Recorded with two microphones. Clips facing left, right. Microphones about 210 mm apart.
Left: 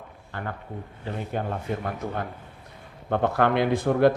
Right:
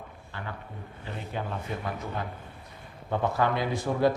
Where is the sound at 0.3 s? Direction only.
50° left (ahead or behind).